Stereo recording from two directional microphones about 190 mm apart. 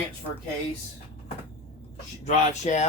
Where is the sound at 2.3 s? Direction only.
35° left (ahead or behind).